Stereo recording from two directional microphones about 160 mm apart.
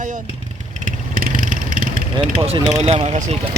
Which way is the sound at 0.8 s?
60° right (ahead or behind).